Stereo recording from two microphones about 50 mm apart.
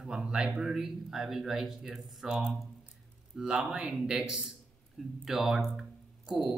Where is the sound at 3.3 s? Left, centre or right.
Centre.